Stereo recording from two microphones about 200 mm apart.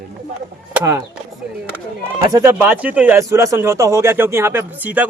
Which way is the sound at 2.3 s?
10° right (ahead or behind).